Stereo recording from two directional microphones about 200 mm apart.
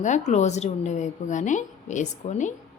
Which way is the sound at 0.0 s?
35° left (ahead or behind).